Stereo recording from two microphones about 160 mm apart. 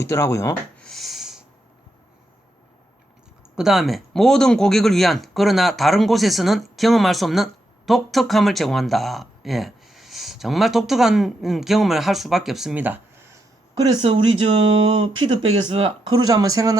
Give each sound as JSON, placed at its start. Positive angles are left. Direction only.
{"t": 0.0, "sound": "speech", "side_deg": 15}
{"t": 0.8, "sound": "a sound", "side_deg": 0}
{"t": 3.5, "sound": "speech", "side_deg": -5}